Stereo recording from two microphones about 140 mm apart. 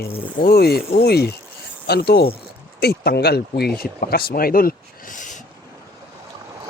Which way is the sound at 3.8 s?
90° left.